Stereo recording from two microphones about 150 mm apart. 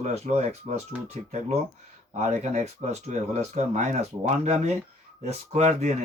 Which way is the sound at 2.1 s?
50° right (ahead or behind).